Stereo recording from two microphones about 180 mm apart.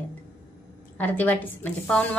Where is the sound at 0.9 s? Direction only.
10° left (ahead or behind).